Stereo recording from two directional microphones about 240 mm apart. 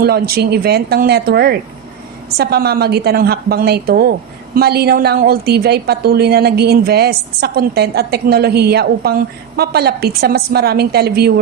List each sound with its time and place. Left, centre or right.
0.0 s a woman's voice: right